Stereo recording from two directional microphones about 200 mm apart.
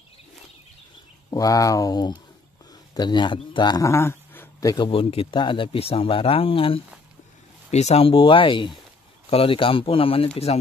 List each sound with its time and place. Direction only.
1.3 s a man's voice: 15° left (ahead or behind)